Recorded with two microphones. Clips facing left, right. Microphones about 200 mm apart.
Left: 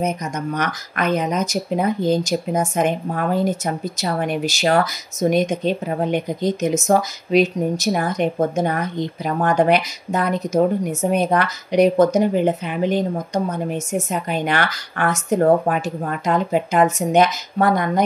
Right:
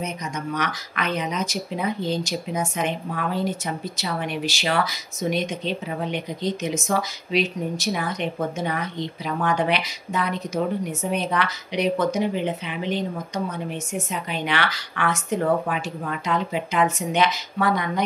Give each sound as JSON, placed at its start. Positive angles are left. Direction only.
{"t": 0.6, "sound": "speech", "side_deg": 45}